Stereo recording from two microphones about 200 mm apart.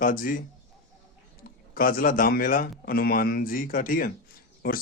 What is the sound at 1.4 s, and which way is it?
Speech, 45° left (ahead or behind).